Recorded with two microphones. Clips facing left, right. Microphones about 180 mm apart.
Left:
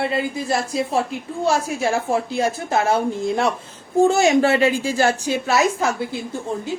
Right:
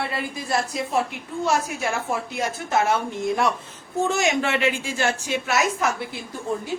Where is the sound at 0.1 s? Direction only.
25° left (ahead or behind).